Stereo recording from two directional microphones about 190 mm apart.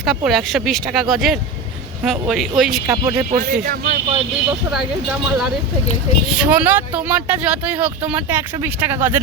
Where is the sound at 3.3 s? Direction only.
45° right (ahead or behind).